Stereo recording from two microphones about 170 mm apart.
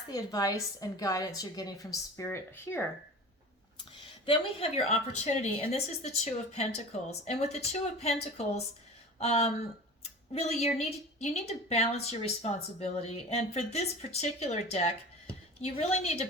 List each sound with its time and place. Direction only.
0.1 s a woman's voice: 20° left (ahead or behind)
4.3 s speech: 35° left (ahead or behind)